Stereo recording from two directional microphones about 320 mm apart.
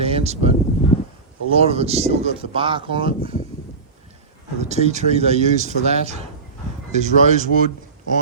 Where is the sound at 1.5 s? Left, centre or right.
Centre.